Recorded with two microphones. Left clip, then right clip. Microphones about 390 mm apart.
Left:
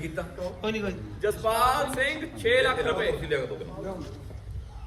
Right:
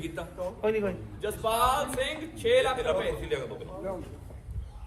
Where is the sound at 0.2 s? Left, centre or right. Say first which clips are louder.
Right 1 dB; centre.